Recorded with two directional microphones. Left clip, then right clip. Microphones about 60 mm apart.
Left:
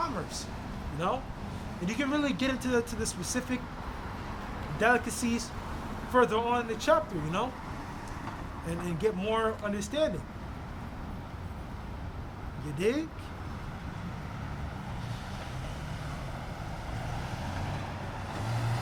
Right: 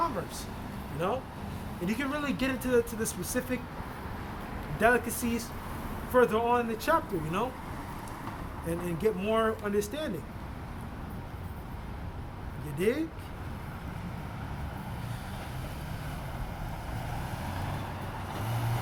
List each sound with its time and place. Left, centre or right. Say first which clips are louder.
0.9 s speech: even; left
4.8 s speech: right 1 dB; left
8.6 s speech: right 1 dB; left
12.8 s speech: right 1 dB; left
18.3 s vehicle: even; centre